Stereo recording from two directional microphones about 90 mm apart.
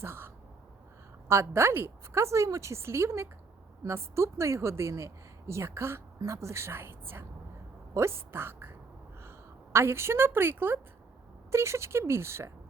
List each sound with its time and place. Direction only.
0.0 s speech: 25° right (ahead or behind)
1.3 s a woman's voice: 30° right (ahead or behind)
9.7 s a woman's voice: 30° right (ahead or behind)